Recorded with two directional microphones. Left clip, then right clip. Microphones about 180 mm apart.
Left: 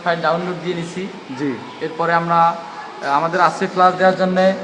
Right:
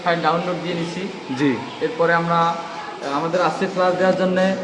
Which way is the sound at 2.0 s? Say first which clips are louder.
Left 3 dB; 65° left (ahead or behind).